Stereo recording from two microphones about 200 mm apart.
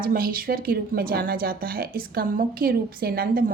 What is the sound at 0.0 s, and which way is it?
Speech, 45° right (ahead or behind).